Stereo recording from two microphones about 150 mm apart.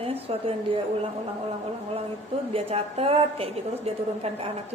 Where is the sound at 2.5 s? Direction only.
40° right (ahead or behind).